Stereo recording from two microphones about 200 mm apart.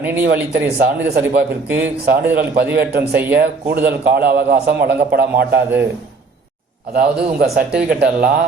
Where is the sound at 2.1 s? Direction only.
50° right (ahead or behind).